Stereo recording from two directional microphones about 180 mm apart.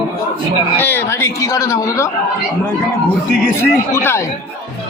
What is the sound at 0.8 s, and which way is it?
Speech, 10° left (ahead or behind).